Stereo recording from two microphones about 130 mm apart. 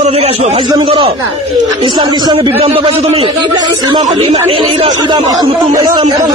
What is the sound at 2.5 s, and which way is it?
A man's voice, 45° right (ahead or behind).